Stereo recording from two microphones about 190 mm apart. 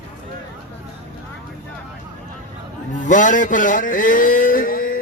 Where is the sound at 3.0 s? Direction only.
40° left (ahead or behind).